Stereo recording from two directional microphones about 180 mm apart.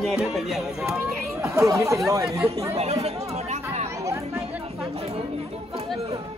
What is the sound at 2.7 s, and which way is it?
Chatter, 35° right (ahead or behind).